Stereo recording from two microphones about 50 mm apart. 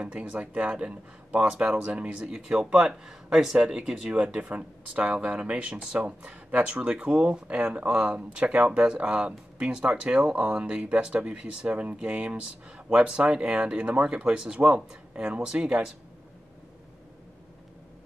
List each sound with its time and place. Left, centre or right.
0.0 s speech: right